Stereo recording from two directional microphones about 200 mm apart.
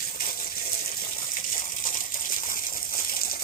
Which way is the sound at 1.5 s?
45° left (ahead or behind).